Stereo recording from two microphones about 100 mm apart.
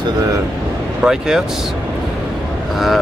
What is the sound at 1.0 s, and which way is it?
Speech, 5° right (ahead or behind).